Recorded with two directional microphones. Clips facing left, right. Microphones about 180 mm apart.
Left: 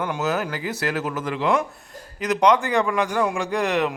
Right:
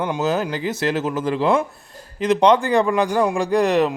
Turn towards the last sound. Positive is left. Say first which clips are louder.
# right 5 dB
turn(degrees=-35)  # may be behind; listen again after turning